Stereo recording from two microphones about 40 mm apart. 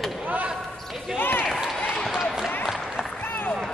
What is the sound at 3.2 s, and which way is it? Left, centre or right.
Run, left.